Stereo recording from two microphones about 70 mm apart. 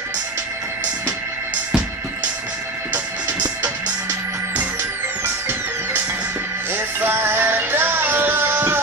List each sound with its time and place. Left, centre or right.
5.2 s music: right